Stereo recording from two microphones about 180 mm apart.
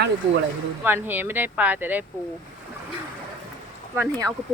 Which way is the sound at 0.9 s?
10° right (ahead or behind).